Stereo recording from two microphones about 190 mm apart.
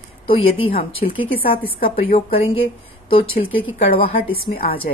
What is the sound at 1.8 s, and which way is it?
Speech, 50° left (ahead or behind).